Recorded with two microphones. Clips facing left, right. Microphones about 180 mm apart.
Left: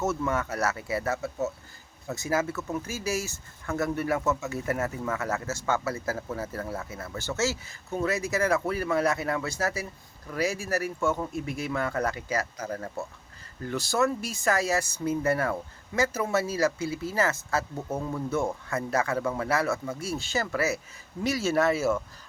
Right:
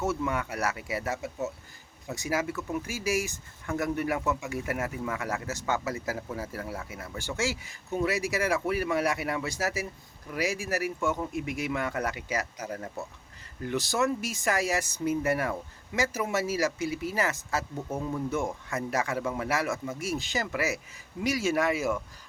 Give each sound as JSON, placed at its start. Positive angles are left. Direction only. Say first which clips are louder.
{"t": 0.0, "sound": "speech", "louder": "left 2 dB", "side_deg": -15}
{"t": 17.7, "sound": "speech", "louder": "left 2 dB", "side_deg": 20}
{"t": 18.9, "sound": "speech", "louder": "left 3 dB", "side_deg": -15}